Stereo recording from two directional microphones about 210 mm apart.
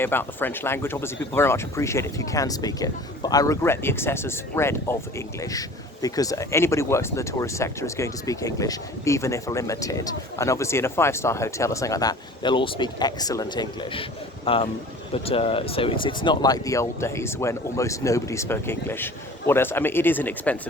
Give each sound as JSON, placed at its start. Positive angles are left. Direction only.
{"t": 0.0, "sound": "speech", "side_deg": 10}